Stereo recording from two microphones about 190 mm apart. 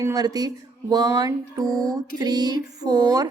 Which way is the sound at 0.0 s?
20° right (ahead or behind).